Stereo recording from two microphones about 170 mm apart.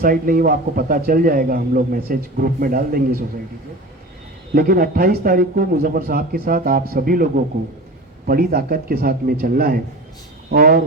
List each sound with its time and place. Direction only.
0.0 s a man's voice: 55° right (ahead or behind)
4.5 s a man's voice: 60° right (ahead or behind)
8.3 s a man's voice: 60° right (ahead or behind)